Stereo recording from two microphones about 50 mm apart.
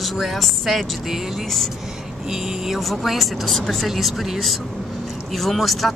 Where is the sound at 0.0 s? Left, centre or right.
Centre.